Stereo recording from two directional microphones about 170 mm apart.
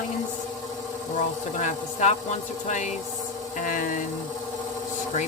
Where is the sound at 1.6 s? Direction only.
45° left (ahead or behind).